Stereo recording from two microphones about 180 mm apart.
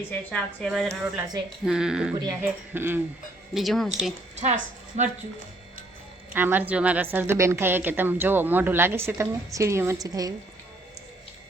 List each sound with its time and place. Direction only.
0.1 s a woman's voice: 5° left (ahead or behind)
2.1 s speech: 20° right (ahead or behind)
2.4 s a woman's voice: 10° right (ahead or behind)
3.5 s a woman's voice: centre (ahead or behind)
4.4 s a woman's voice: 40° right (ahead or behind)
6.3 s a woman's voice: 10° right (ahead or behind)